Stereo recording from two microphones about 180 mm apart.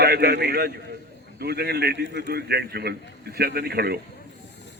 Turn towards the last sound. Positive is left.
turn(degrees=-60)  # may be behind; listen again after turning